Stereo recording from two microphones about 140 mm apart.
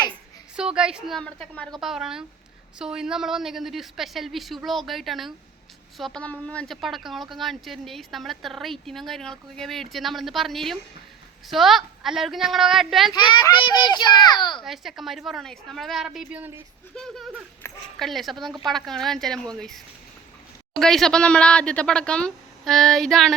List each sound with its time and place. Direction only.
0.5 s a woman's voice: 5° right (ahead or behind)
13.1 s a child's voice: 30° left (ahead or behind)
14.6 s a woman's voice: centre (ahead or behind)
17.6 s a sound: 15° left (ahead or behind)
18.0 s a woman's voice: centre (ahead or behind)